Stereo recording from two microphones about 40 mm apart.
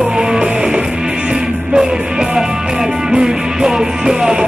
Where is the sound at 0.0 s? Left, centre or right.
Right.